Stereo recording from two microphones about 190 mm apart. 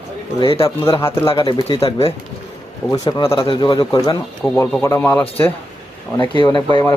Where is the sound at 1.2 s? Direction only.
25° left (ahead or behind).